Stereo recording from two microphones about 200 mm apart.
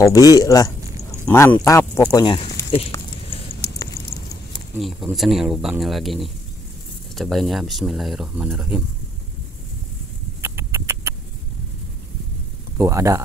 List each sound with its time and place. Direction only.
0.0 s speech: 15° left (ahead or behind)
3.3 s a sound: 30° left (ahead or behind)
4.7 s speech: centre (ahead or behind)
10.4 s rodents: 10° right (ahead or behind)
12.7 s speech: 15° right (ahead or behind)